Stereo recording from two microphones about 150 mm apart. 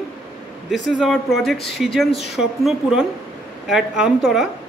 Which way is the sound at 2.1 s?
90° left.